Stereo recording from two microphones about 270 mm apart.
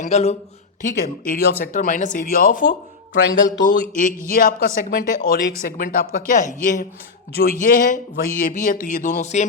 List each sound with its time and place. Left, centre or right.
0.0 s speech: left